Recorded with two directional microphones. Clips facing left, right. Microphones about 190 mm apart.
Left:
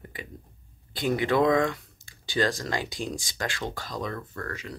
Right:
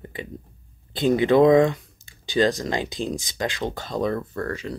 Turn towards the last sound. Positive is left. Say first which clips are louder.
# right 8 dB
turn(degrees=-30)  # may be behind; listen again after turning